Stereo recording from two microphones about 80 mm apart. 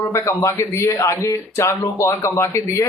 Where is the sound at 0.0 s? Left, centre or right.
Left.